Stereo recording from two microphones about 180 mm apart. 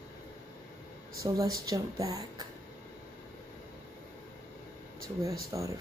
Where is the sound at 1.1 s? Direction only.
20° right (ahead or behind).